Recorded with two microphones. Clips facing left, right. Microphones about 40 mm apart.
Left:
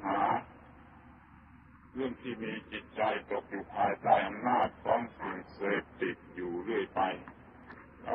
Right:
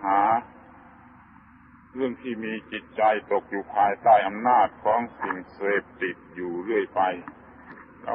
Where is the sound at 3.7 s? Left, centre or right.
Right.